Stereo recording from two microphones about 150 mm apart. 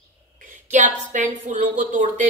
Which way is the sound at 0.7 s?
55° right (ahead or behind).